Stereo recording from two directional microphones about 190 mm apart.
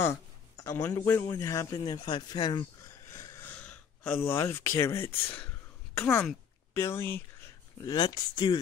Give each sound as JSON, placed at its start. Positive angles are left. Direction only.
{"t": 0.7, "sound": "speech", "side_deg": 15}
{"t": 3.1, "sound": "a sound", "side_deg": 15}
{"t": 4.3, "sound": "speech", "side_deg": 15}